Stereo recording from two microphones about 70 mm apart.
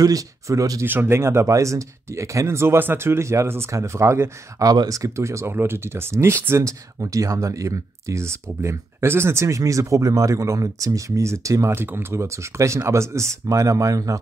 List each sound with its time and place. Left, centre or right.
0.0 s speech: right
0.8 s speech: right
11.7 s speech: right